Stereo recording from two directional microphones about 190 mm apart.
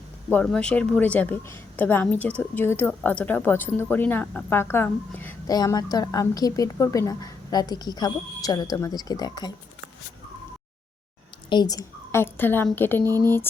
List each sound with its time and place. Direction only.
0.3 s a woman's voice: 10° left (ahead or behind)
11.4 s a woman's voice: 20° left (ahead or behind)